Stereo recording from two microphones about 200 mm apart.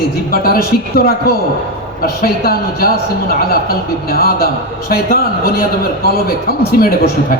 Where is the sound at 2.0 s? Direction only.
50° left (ahead or behind).